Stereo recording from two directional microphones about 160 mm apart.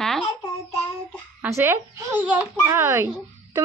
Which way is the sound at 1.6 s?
15° right (ahead or behind).